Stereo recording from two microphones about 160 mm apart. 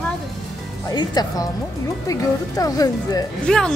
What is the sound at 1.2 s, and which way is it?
Speech, 25° left (ahead or behind).